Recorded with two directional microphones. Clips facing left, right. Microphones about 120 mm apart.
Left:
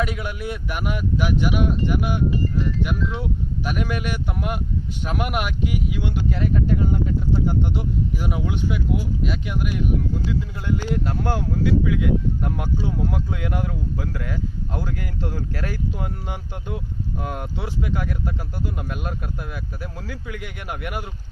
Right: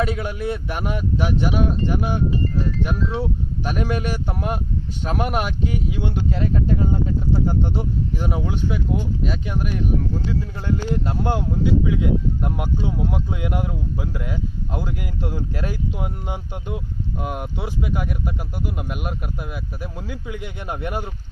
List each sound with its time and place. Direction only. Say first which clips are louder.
0.0 s speech: right 3 dB; 30° right (ahead or behind)